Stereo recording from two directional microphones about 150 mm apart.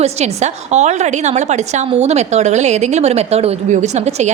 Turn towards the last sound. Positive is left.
turn(degrees=-50)  # may be behind; listen again after turning